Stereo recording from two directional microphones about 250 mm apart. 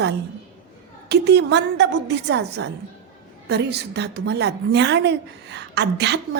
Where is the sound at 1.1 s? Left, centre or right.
Right.